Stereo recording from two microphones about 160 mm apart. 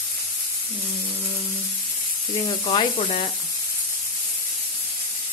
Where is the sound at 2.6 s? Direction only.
35° left (ahead or behind).